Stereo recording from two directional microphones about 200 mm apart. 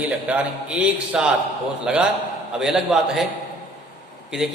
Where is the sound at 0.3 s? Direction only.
5° right (ahead or behind).